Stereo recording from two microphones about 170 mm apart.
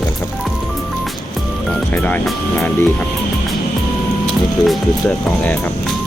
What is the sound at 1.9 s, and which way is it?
Speech, 10° left (ahead or behind).